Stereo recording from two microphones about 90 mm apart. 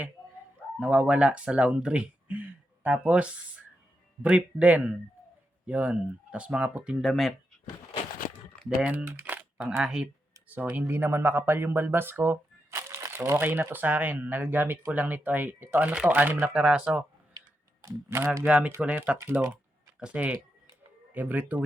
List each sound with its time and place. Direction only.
0.8 s speech: 15° right (ahead or behind)
7.0 s speech: centre (ahead or behind)
8.8 s speech: 15° right (ahead or behind)
10.5 s speech: 20° right (ahead or behind)
17.8 s speech: 25° right (ahead or behind)
18.4 s speech: 15° right (ahead or behind)
19.1 s speech: 25° right (ahead or behind)
20.0 s speech: 10° right (ahead or behind)